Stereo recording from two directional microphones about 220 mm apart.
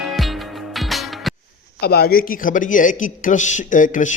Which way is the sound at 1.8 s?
45° left (ahead or behind).